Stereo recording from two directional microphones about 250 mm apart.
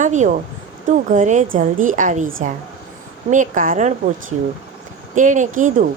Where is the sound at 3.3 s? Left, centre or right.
Right.